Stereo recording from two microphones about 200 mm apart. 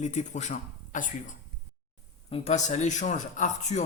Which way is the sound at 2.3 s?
35° left (ahead or behind).